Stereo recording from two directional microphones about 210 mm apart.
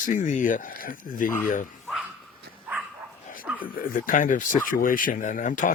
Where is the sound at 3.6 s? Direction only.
40° left (ahead or behind).